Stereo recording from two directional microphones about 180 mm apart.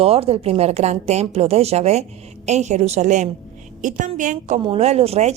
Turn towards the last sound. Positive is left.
turn(degrees=-35)  # may be behind; listen again after turning